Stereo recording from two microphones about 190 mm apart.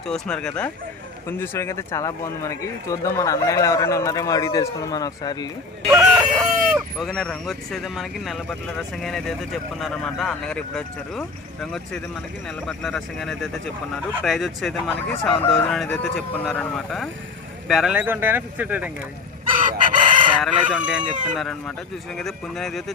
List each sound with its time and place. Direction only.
0.1 s speech: 5° left (ahead or behind); by 5.5 s 20° left (ahead or behind)
5.9 s a sound: 15° right (ahead or behind)
6.3 s speech: centre (ahead or behind)
19.5 s chicken: 45° right (ahead or behind)
20.4 s speech: 5° right (ahead or behind)